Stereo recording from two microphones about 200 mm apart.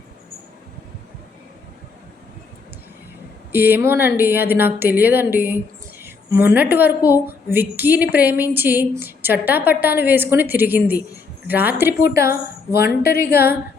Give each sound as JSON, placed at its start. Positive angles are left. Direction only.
{"t": 3.5, "sound": "a woman's voice", "side_deg": -10}
{"t": 12.3, "sound": "a woman's voice", "side_deg": 50}